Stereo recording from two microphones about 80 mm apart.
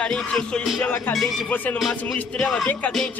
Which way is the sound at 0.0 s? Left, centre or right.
Centre.